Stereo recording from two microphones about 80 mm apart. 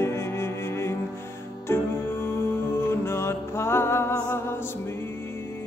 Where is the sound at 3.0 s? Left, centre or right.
Left.